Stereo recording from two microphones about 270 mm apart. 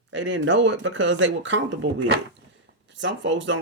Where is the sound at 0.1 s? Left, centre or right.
Right.